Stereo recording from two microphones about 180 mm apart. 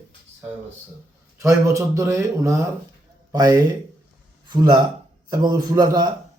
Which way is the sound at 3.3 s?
20° right (ahead or behind).